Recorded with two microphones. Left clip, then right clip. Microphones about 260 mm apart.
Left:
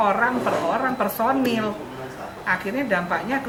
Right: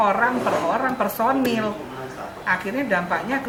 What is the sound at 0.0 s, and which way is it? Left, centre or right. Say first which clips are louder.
A woman's voice: right 1 dB; centre.